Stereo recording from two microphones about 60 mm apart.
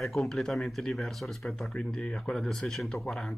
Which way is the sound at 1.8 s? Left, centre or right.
Centre.